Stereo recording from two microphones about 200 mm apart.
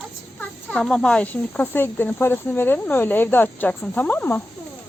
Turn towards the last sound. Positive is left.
turn(degrees=10)  # may be behind; listen again after turning